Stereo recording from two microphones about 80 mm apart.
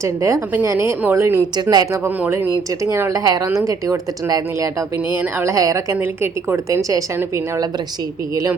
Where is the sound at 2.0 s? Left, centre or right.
Right.